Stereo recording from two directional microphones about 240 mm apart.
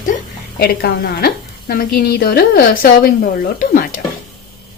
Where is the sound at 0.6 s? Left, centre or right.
Left.